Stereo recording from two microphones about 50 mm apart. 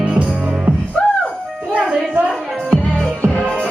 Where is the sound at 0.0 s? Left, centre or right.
Right.